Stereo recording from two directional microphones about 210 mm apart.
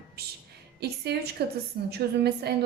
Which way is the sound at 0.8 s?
50° right (ahead or behind).